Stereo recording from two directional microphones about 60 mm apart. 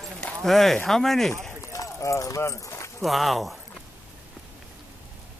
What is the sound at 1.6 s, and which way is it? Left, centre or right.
Clip-clop, left.